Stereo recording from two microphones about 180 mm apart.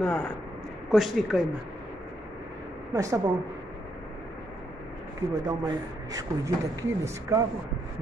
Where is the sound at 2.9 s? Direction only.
20° right (ahead or behind).